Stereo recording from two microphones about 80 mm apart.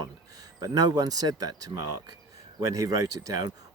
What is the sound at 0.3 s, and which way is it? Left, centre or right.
Speech, right.